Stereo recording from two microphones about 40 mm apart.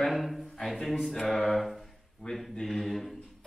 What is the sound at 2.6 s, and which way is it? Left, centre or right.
Speech, centre.